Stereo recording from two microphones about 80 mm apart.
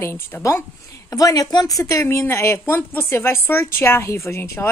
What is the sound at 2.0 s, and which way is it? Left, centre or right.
A woman's voice, left.